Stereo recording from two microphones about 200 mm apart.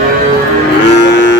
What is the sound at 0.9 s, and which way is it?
Livestock, 60° left (ahead or behind).